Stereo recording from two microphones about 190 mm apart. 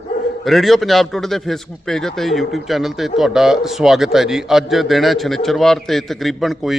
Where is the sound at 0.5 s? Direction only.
Centre (ahead or behind).